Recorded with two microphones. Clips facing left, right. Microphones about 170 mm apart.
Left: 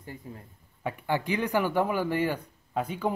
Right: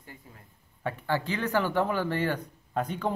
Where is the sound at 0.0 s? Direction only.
30° left (ahead or behind).